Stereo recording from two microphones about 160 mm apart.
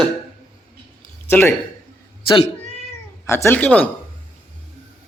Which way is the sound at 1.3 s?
15° left (ahead or behind).